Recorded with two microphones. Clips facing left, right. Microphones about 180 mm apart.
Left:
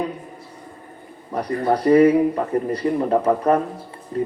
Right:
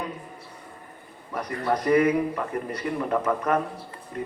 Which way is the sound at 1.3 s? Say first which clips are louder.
Left 6 dB; 35° left (ahead or behind).